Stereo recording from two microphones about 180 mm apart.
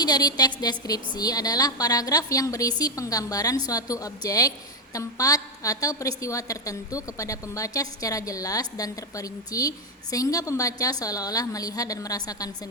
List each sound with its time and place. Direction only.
0.0 s a woman's voice: 20° left (ahead or behind)